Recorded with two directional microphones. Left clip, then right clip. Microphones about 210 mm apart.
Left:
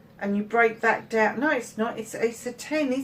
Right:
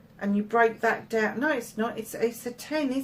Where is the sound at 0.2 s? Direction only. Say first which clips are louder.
Left 1 dB; 45° right (ahead or behind).